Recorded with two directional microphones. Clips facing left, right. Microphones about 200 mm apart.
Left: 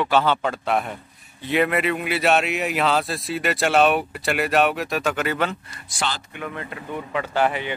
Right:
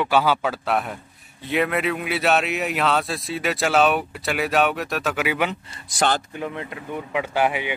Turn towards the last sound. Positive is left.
turn(degrees=-10)  # may be behind; listen again after turning